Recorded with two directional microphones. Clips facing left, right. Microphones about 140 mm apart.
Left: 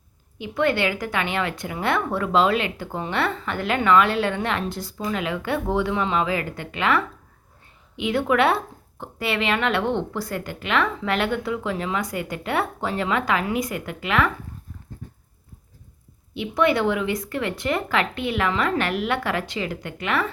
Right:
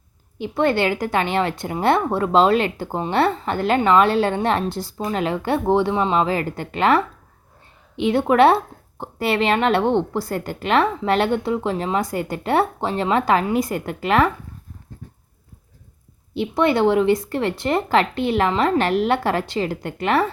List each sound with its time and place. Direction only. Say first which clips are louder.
0.3 s speech: right 3 dB; 35° right (ahead or behind)
16.3 s speech: right 2 dB; 35° right (ahead or behind)